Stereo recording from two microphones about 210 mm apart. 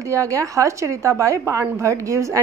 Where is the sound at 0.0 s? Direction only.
15° right (ahead or behind).